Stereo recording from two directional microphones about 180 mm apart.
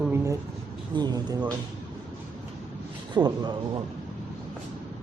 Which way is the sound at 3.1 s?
25° right (ahead or behind).